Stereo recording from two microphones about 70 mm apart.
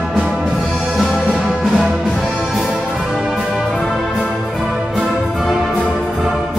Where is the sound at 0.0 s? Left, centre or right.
Centre.